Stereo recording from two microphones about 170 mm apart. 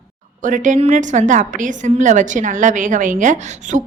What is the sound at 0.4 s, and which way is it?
A woman's voice, 50° right (ahead or behind).